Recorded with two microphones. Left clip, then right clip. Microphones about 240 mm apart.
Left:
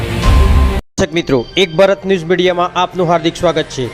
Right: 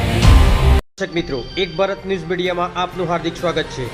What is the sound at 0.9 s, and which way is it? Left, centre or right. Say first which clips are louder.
A man's voice: left 8 dB; left.